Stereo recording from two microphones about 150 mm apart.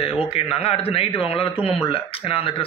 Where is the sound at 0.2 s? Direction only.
40° left (ahead or behind).